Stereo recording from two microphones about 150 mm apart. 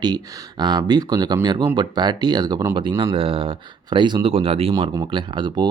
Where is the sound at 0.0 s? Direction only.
30° right (ahead or behind).